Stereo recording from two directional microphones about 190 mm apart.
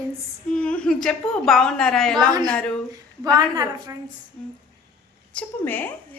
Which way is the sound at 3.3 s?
20° right (ahead or behind).